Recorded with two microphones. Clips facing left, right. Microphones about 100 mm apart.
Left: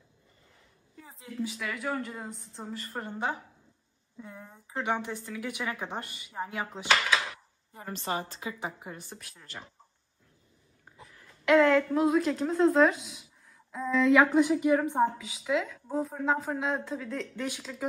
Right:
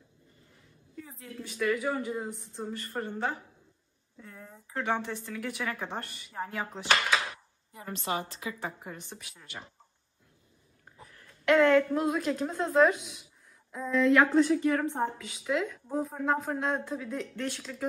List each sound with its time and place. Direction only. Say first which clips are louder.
0.9 s a sound: right 4 dB; 25° left (ahead or behind)
1.4 s a woman's voice: right 4 dB; centre (ahead or behind)
3.1 s a woman's voice: left 3 dB; 15° left (ahead or behind)
8.0 s a woman's voice: even; 35° left (ahead or behind)
8.7 s a woman's voice: even; 5° left (ahead or behind)
11.1 s a woman's voice: left 1 dB; centre (ahead or behind)
14.3 s a woman's voice: left 1 dB; 15° left (ahead or behind)
15.1 s a woman's voice: left 1 dB; centre (ahead or behind)